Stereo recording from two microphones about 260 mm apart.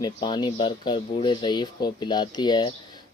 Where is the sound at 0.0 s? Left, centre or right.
Centre.